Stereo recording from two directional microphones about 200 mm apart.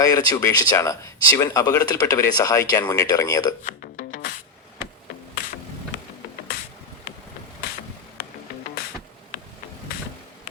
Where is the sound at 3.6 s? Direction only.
40° left (ahead or behind).